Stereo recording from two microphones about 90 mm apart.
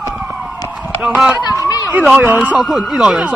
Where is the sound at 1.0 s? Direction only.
5° right (ahead or behind).